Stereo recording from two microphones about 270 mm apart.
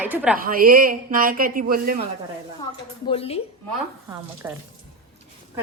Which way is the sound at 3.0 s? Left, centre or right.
Left.